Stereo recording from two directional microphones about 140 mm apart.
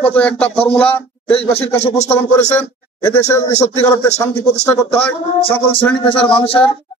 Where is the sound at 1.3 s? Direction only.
45° left (ahead or behind).